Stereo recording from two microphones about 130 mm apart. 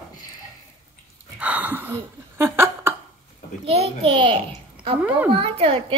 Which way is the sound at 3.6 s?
50° right (ahead or behind).